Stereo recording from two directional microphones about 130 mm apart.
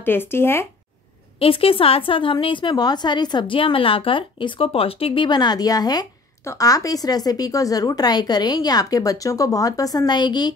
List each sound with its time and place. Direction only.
0.0 s speech: 15° left (ahead or behind)
1.4 s a woman's voice: 45° left (ahead or behind)